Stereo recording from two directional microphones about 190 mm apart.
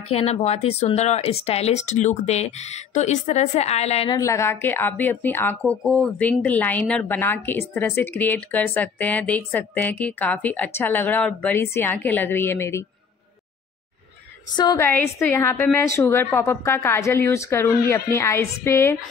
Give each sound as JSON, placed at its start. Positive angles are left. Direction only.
{"t": 0.1, "sound": "speech", "side_deg": 35}
{"t": 4.1, "sound": "a woman's voice", "side_deg": 15}
{"t": 14.5, "sound": "a woman's voice", "side_deg": 20}